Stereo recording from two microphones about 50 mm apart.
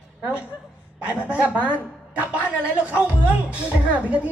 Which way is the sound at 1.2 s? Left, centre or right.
Right.